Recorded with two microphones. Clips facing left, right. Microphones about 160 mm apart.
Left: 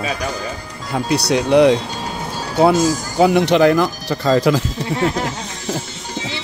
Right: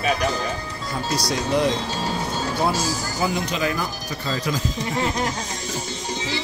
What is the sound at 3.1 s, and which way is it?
Speech, 70° left (ahead or behind).